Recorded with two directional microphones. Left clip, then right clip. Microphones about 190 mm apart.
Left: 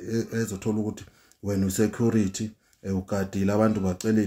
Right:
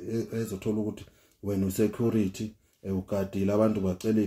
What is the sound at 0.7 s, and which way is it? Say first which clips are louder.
Speech: left 2 dB; 25° left (ahead or behind).